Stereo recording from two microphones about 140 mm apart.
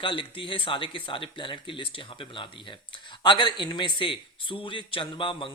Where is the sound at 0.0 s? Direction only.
35° left (ahead or behind).